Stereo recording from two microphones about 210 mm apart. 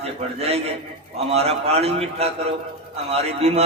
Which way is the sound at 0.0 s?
30° right (ahead or behind).